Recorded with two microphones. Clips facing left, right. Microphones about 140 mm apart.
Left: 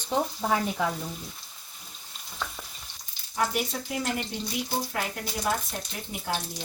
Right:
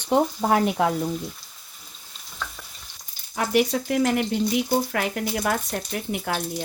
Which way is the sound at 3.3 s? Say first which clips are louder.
Right 7 dB; 75° right (ahead or behind).